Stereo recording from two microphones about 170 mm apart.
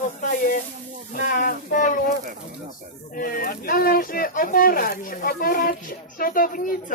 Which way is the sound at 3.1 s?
55° left (ahead or behind).